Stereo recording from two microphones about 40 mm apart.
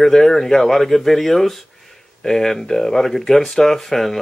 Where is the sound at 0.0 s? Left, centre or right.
Centre.